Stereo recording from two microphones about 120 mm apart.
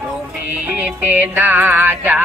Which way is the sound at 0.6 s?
15° right (ahead or behind).